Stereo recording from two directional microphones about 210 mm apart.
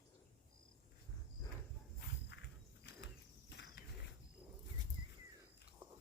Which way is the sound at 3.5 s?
55° left (ahead or behind).